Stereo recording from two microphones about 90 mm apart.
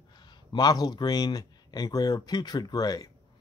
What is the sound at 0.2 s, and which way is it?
Speech, 55° left (ahead or behind).